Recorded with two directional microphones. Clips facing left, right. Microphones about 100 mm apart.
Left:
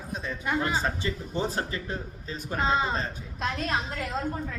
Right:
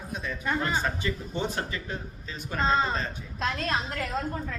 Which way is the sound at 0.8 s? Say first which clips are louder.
Even; 30° left (ahead or behind).